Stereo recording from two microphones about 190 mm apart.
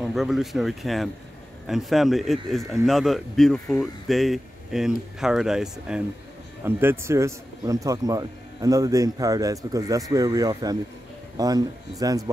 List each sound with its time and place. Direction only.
0.0 s speech: centre (ahead or behind); by 12.3 s 20° right (ahead or behind)